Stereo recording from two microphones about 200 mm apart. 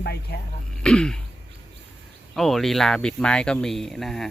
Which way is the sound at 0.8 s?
5° left (ahead or behind).